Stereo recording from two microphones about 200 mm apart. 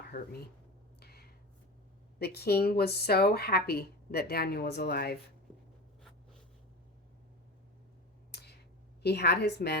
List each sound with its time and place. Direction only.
0.1 s speech: 45° left (ahead or behind)
0.9 s writing: 55° left (ahead or behind)
2.1 s speech: 50° left (ahead or behind)
8.3 s a sound: 55° left (ahead or behind)
9.0 s a woman's voice: 55° left (ahead or behind)